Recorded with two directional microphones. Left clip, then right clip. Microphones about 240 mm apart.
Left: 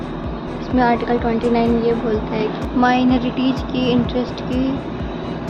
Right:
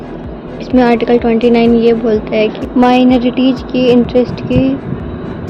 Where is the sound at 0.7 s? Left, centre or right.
Right.